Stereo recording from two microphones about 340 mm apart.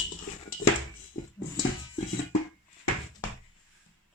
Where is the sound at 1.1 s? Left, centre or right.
Left.